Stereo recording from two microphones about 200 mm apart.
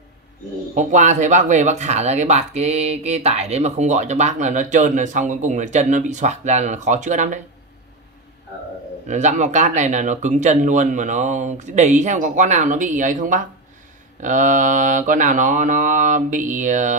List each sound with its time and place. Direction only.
0.7 s speech: 40° right (ahead or behind)
9.0 s speech: 35° right (ahead or behind)